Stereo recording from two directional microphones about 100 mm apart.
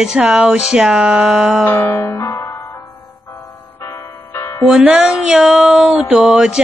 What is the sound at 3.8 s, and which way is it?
Music, 25° left (ahead or behind).